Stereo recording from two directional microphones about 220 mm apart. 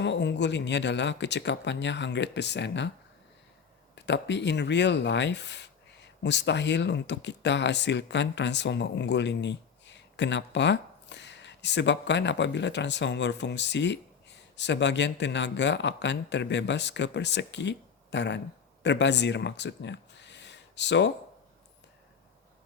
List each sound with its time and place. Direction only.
0.0 s speech: 50° left (ahead or behind)
3.9 s speech: 50° left (ahead or behind)